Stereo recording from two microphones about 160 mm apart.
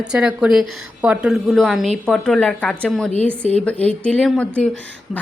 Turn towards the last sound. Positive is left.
turn(degrees=5)  # may be behind; listen again after turning